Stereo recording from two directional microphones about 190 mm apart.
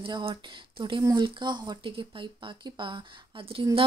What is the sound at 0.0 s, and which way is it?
Speech, 30° right (ahead or behind).